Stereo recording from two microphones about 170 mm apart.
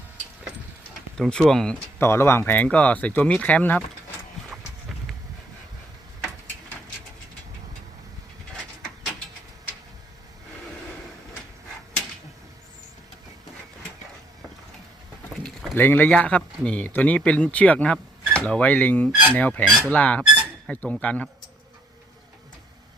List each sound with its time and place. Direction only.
1.1 s speech: 5° left (ahead or behind)
2.0 s speech: 15° left (ahead or behind)
15.4 s speech: 10° left (ahead or behind)